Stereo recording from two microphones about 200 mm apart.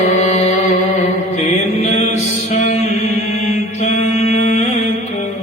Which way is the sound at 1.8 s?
35° left (ahead or behind).